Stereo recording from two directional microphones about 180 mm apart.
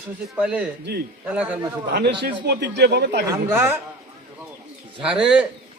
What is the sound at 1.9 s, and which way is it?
Speech, 70° right (ahead or behind).